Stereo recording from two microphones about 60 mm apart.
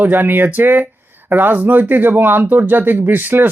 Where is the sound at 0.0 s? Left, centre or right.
Right.